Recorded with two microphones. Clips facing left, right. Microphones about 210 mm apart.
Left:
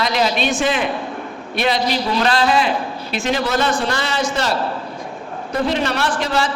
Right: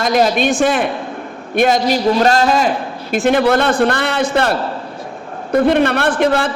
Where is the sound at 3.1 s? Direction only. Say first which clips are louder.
Right 7 dB; 55° right (ahead or behind).